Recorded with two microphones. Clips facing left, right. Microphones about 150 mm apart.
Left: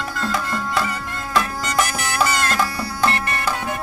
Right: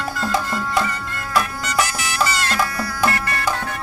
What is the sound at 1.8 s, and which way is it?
Music, 55° left (ahead or behind).